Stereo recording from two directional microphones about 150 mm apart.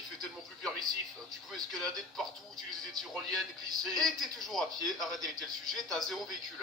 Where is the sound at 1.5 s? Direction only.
Centre (ahead or behind).